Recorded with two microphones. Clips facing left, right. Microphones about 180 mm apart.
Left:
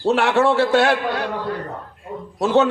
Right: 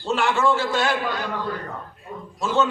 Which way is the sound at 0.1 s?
65° left (ahead or behind).